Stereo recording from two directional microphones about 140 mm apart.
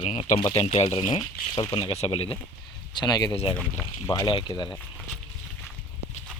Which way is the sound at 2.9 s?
30° left (ahead or behind).